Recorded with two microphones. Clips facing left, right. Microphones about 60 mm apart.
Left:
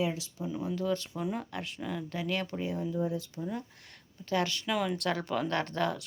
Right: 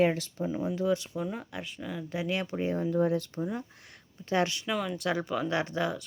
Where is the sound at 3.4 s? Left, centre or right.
Right.